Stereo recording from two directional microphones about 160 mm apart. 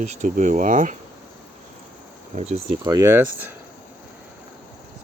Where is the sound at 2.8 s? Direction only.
20° right (ahead or behind).